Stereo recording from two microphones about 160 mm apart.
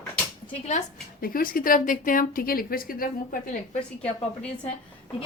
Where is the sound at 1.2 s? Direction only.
60° left (ahead or behind).